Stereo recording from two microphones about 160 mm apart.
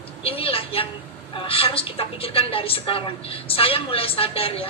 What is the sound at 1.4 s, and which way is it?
A woman's voice, 35° left (ahead or behind).